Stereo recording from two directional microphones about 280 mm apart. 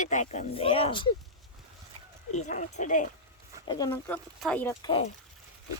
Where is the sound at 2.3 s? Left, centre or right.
Left.